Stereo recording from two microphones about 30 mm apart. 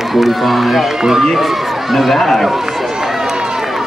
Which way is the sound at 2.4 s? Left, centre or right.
Centre.